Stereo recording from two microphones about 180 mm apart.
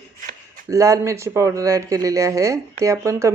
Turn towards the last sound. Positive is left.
turn(degrees=-15)  # may be behind; listen again after turning